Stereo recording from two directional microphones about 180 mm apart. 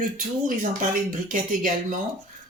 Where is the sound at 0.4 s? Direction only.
45° right (ahead or behind).